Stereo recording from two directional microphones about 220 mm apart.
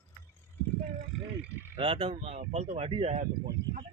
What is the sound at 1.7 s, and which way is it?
A man's voice, 25° right (ahead or behind).